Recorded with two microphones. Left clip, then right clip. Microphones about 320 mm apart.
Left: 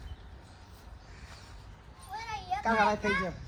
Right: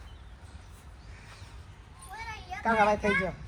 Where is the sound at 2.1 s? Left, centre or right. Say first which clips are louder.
Left 5 dB; left.